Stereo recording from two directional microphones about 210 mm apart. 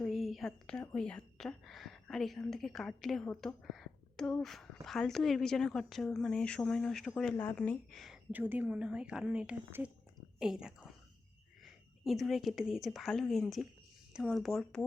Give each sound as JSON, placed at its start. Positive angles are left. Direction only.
{"t": 0.0, "sound": "a woman's voice", "side_deg": 0}